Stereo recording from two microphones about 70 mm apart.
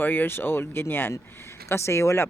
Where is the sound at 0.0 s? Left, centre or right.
Left.